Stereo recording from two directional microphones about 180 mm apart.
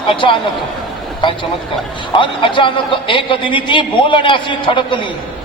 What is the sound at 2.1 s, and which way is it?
A man's voice, 30° left (ahead or behind).